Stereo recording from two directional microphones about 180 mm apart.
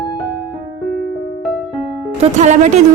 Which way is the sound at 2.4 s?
40° right (ahead or behind).